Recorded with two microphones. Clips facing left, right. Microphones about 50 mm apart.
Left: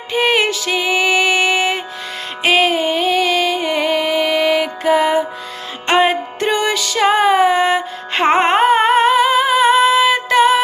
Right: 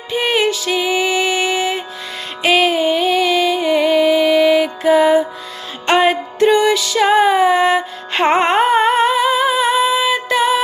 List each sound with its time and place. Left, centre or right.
0.1 s music: left
2.4 s music: left
6.5 s music: left